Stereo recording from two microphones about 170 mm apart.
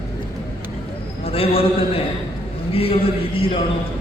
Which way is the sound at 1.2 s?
35° left (ahead or behind).